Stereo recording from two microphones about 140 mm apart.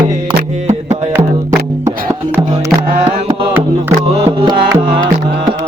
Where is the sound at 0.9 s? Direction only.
20° right (ahead or behind).